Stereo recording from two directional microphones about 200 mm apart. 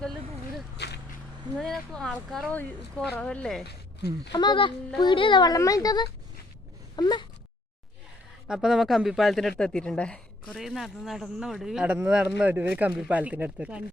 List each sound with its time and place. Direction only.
0.0 s a sound: centre (ahead or behind)
1.5 s speech: centre (ahead or behind)
4.3 s a child's voice: 20° left (ahead or behind)
8.4 s speech: 5° right (ahead or behind)